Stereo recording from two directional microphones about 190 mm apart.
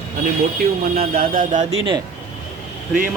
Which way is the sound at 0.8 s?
45° right (ahead or behind).